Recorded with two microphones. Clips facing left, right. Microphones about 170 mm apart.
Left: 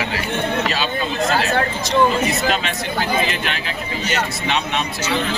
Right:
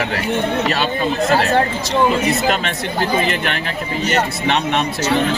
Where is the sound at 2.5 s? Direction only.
55° right (ahead or behind).